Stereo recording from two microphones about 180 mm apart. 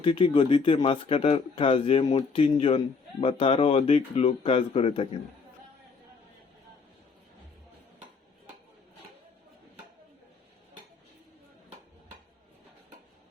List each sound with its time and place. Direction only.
0.0 s speech: 30° left (ahead or behind)